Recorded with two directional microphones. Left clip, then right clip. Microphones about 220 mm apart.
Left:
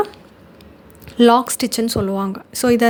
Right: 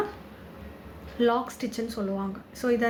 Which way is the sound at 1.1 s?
55° left (ahead or behind).